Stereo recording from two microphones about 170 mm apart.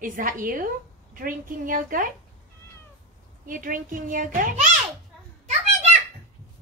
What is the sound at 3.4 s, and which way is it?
A woman's voice, 55° right (ahead or behind).